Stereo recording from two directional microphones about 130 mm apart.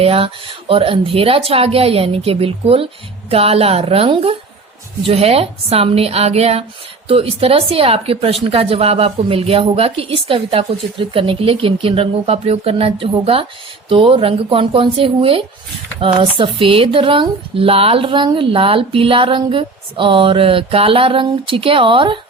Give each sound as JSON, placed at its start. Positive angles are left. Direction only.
{"t": 0.0, "sound": "speech", "side_deg": -45}